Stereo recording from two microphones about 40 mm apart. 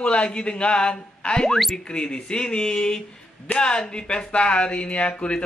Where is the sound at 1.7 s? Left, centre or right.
Left.